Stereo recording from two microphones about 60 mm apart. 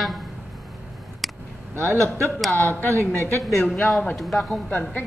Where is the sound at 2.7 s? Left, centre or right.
Left.